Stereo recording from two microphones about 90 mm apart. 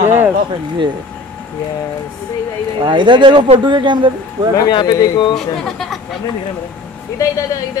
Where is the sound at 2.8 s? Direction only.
60° right (ahead or behind).